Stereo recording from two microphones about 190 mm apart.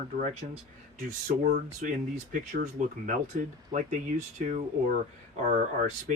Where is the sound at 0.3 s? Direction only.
35° right (ahead or behind).